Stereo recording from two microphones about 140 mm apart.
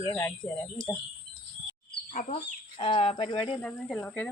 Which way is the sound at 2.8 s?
40° left (ahead or behind).